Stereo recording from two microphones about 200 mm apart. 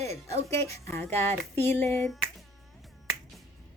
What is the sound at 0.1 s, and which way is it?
Speech, 30° right (ahead or behind).